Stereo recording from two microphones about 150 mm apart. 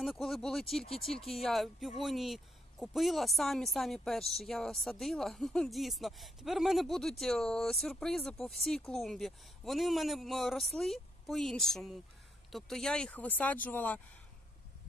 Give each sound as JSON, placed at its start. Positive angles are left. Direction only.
{"t": 0.0, "sound": "speech", "side_deg": 0}